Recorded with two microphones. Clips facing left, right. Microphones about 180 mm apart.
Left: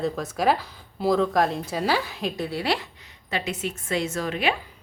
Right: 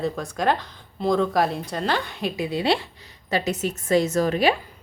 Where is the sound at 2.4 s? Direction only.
20° right (ahead or behind).